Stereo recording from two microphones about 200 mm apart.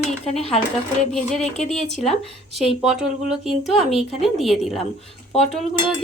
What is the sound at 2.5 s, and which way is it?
Speech, centre (ahead or behind).